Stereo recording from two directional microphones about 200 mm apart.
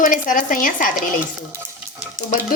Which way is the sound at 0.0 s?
40° left (ahead or behind).